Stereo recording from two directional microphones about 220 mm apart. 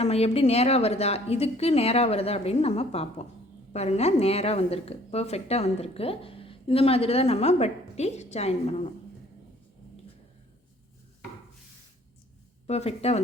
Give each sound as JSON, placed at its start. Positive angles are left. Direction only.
{"t": 0.0, "sound": "a woman's voice", "side_deg": 25}
{"t": 12.6, "sound": "a woman's voice", "side_deg": 30}